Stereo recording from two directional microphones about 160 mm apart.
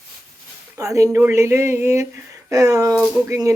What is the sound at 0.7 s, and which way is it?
Speech, 20° right (ahead or behind).